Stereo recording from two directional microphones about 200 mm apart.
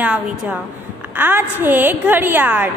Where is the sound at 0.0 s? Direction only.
5° right (ahead or behind).